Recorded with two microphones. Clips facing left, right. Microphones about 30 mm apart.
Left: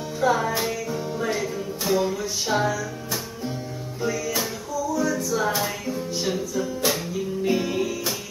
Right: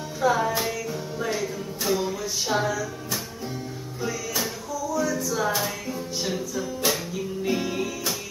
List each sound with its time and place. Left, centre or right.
0.2 s music: centre